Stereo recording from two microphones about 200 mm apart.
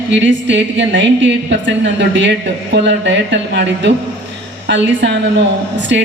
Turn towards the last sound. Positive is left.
turn(degrees=-60)  # may be behind; listen again after turning